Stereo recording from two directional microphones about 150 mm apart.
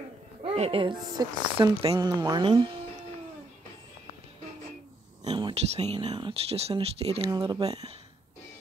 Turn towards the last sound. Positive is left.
turn(degrees=-30)  # may be behind; listen again after turning